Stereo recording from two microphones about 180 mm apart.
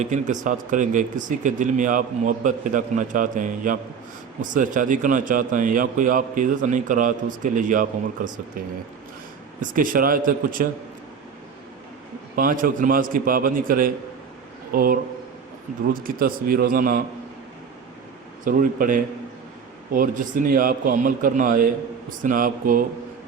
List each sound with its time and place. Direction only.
0.0 s a man's voice: 45° right (ahead or behind)
9.6 s a man's voice: 50° right (ahead or behind)
12.4 s a man's voice: 50° right (ahead or behind)
18.4 s a man's voice: 50° right (ahead or behind)